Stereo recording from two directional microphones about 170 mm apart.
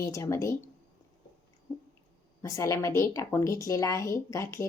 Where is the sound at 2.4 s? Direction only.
20° left (ahead or behind).